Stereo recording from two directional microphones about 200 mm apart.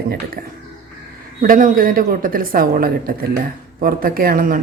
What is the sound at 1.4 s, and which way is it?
A woman's voice, 45° right (ahead or behind).